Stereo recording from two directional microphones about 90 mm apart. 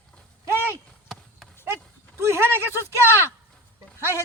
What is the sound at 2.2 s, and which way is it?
Speech, 30° right (ahead or behind).